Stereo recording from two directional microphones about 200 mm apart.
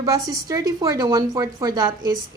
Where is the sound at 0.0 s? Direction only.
15° right (ahead or behind).